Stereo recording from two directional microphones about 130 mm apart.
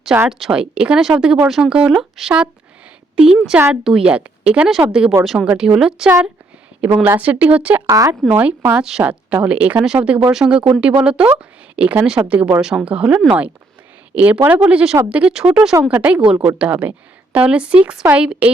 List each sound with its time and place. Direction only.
0.3 s speech: centre (ahead or behind)
3.7 s speech: 5° right (ahead or behind)
6.8 s speech: 15° right (ahead or behind)
7.9 s speech: 25° right (ahead or behind)
8.3 s speech: 10° right (ahead or behind)